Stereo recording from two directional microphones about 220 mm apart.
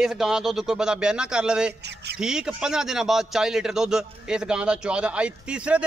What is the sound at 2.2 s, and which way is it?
A man's voice, 5° right (ahead or behind).